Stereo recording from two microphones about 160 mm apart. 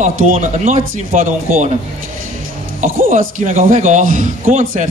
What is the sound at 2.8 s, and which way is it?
A man's voice, 60° right (ahead or behind).